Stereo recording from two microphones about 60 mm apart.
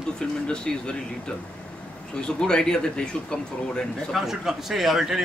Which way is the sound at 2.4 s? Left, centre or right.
Centre.